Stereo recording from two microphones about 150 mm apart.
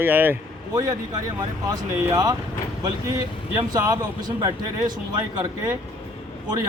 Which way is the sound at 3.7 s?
25° right (ahead or behind).